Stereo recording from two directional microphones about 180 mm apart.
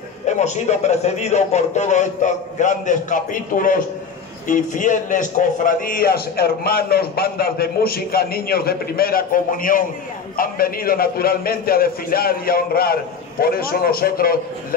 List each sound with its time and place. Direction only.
0.3 s a man's voice: 40° left (ahead or behind); by 14.8 s 55° left (ahead or behind)